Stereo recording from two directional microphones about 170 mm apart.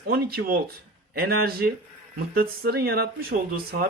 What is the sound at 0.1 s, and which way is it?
Speech, 65° right (ahead or behind).